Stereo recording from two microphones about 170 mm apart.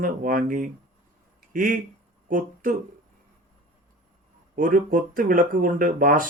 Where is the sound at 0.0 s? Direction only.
55° right (ahead or behind).